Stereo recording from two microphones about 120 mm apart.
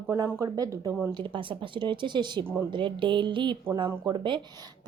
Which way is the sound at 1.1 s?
45° right (ahead or behind).